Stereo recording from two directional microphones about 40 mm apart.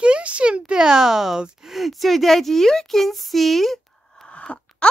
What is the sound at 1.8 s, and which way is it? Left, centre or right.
Speech, centre.